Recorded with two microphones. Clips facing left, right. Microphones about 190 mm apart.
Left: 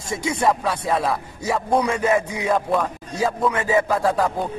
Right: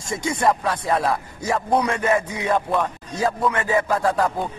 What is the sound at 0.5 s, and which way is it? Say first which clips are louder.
A man's voice: right 1 dB; centre (ahead or behind).